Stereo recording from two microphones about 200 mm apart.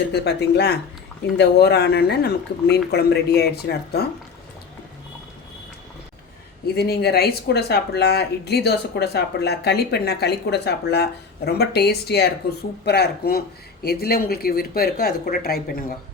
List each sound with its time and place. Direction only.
0.1 s speech: 55° left (ahead or behind)
6.7 s speech: 50° left (ahead or behind)